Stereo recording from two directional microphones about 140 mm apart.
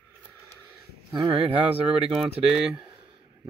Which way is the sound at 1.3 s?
45° right (ahead or behind).